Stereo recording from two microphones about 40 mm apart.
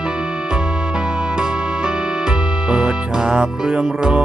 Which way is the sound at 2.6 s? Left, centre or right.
Centre.